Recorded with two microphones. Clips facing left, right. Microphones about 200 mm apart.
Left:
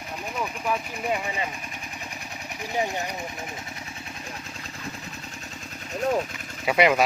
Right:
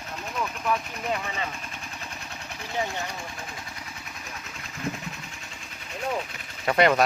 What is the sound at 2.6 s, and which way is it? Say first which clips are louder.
Speech: left 3 dB; 15° left (ahead or behind).